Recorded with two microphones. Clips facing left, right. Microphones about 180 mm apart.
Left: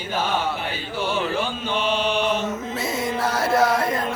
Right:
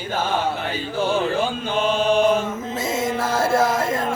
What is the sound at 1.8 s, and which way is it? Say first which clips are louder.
Mantra: right 5 dB; 45° right (ahead or behind).